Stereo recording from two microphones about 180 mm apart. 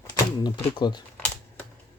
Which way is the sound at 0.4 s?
25° left (ahead or behind).